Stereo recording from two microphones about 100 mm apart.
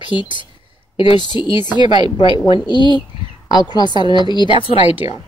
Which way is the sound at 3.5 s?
45° left (ahead or behind).